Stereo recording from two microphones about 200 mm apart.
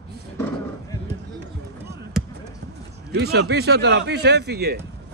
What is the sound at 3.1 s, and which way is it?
Speech, 55° right (ahead or behind).